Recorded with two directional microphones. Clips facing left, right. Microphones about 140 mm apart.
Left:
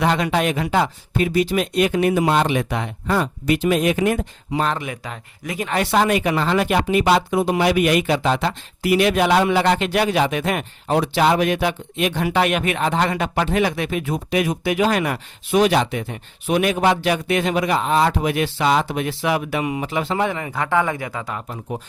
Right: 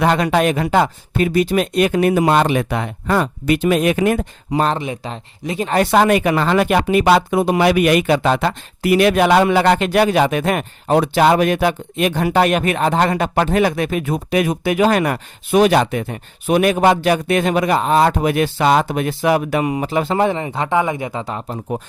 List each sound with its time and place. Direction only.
0.0 s speech: 50° right (ahead or behind)
4.6 s speech: 30° right (ahead or behind)
5.7 s speech: 50° right (ahead or behind)
20.3 s speech: 25° right (ahead or behind)